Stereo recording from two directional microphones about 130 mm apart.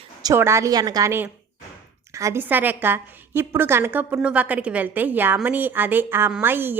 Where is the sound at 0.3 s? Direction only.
20° right (ahead or behind).